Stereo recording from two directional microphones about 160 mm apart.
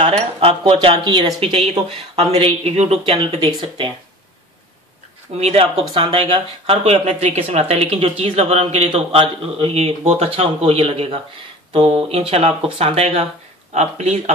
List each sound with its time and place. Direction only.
0.0 s speech: 40° right (ahead or behind)
5.4 s speech: 40° right (ahead or behind)